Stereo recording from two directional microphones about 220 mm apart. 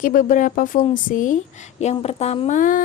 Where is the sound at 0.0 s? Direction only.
40° left (ahead or behind).